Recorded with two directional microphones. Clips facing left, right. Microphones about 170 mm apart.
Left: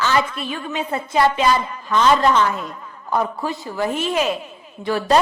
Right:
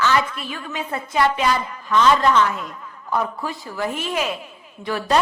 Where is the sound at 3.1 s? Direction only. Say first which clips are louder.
Left 2 dB; 30° left (ahead or behind).